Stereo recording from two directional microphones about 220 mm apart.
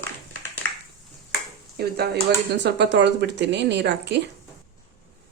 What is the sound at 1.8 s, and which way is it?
Speech, 45° right (ahead or behind).